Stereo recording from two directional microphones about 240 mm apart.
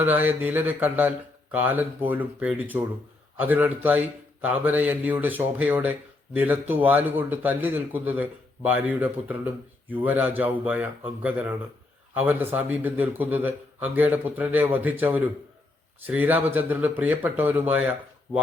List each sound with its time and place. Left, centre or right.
0.0 s a man's voice: centre